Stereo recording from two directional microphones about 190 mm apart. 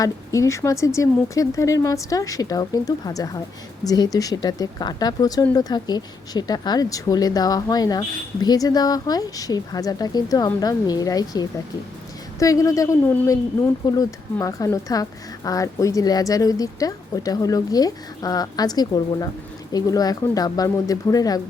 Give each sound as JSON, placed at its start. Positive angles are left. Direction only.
{"t": 0.0, "sound": "speech", "side_deg": 15}